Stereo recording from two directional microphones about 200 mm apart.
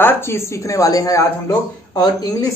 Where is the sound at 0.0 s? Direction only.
10° left (ahead or behind).